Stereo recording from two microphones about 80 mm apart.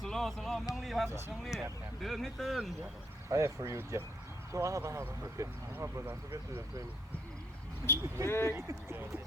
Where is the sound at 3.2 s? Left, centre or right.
Right.